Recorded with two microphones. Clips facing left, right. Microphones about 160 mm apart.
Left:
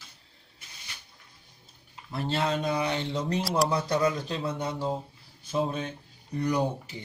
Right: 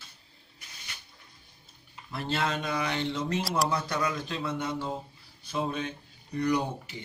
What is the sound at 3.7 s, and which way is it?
Speech, 35° left (ahead or behind).